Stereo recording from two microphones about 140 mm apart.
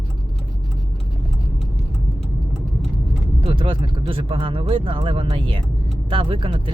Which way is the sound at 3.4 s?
40° right (ahead or behind).